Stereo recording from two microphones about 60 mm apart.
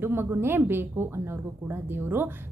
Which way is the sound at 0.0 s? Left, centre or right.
Right.